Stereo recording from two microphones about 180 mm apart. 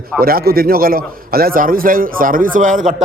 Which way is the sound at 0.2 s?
55° right (ahead or behind).